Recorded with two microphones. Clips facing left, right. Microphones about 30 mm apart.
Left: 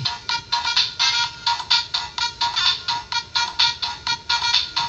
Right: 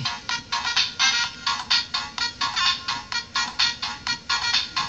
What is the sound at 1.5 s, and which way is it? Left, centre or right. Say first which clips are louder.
Music: left 4 dB; left.